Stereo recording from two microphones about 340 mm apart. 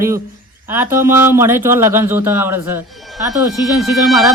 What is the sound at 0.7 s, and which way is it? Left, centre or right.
Speech, centre.